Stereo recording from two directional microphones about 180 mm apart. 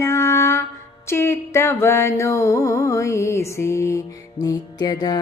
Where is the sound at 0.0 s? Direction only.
15° left (ahead or behind).